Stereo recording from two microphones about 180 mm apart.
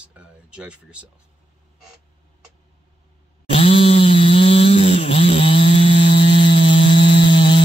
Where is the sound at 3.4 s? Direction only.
30° left (ahead or behind).